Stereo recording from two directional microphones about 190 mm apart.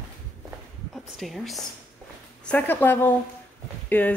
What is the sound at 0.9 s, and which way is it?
Speech, centre (ahead or behind).